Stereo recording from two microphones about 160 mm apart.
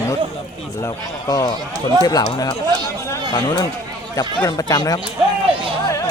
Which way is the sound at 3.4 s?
30° left (ahead or behind).